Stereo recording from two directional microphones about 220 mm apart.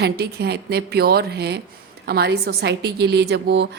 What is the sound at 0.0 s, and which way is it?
A woman's voice, 50° right (ahead or behind).